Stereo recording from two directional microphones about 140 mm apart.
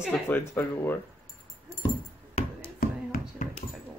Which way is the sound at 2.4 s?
55° left (ahead or behind).